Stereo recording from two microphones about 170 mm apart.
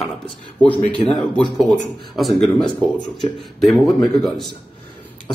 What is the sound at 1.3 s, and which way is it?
Speech, 5° left (ahead or behind).